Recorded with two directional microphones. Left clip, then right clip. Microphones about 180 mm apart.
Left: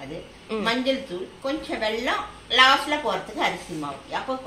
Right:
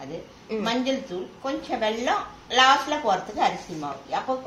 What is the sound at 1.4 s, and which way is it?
A woman's voice, 30° right (ahead or behind).